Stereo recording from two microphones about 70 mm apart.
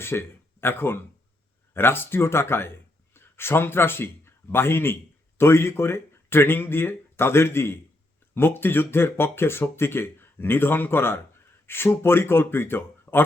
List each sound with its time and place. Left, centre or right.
0.0 s speech: left